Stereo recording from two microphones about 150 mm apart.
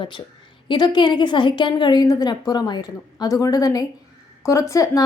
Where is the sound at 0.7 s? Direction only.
30° left (ahead or behind).